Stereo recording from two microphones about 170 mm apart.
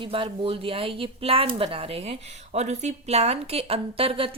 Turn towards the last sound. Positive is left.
turn(degrees=-35)  # may be behind; listen again after turning